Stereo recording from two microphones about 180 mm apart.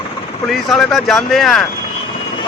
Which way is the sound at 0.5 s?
Centre (ahead or behind).